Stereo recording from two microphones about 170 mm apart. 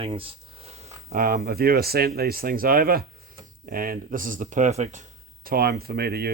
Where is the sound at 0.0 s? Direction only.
35° right (ahead or behind).